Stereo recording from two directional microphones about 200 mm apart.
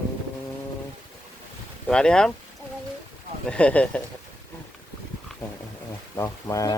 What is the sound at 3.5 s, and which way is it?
Speech, 5° left (ahead or behind).